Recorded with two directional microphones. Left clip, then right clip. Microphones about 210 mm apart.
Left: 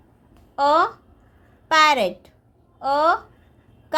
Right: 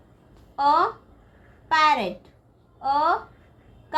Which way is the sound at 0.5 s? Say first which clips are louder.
Left 2 dB; 50° left (ahead or behind).